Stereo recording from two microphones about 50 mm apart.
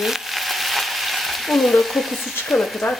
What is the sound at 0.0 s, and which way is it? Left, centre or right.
Frying, centre.